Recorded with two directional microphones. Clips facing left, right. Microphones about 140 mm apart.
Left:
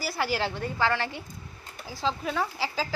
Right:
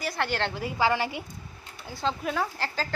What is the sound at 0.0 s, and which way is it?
A woman's voice, 5° left (ahead or behind).